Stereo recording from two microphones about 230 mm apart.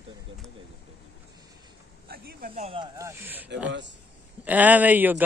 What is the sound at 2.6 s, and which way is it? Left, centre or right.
Speech, right.